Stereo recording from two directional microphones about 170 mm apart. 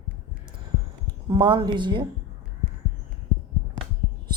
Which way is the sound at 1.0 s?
25° right (ahead or behind).